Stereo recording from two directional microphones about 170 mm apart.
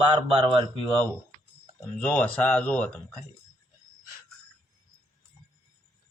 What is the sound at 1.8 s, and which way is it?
Speech, 10° left (ahead or behind).